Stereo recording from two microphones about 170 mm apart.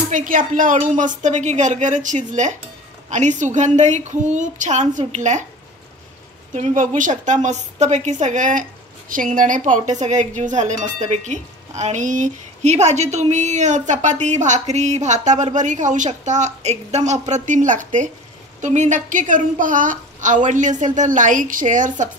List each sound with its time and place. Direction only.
0.1 s speech: 50° right (ahead or behind)
6.5 s speech: 45° right (ahead or behind)